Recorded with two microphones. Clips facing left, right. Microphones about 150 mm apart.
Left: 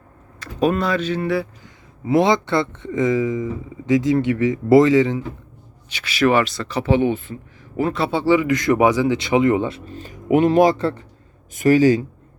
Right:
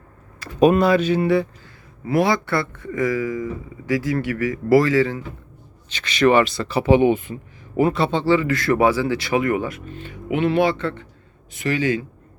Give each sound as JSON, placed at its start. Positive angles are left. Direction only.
{"t": 0.3, "sound": "speech", "side_deg": -10}
{"t": 1.6, "sound": "speech", "side_deg": 20}
{"t": 5.9, "sound": "speech", "side_deg": 10}
{"t": 7.9, "sound": "speech", "side_deg": 0}
{"t": 8.2, "sound": "speech", "side_deg": 15}